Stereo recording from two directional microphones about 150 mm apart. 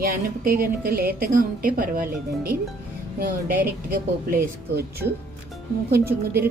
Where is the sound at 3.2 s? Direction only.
85° right.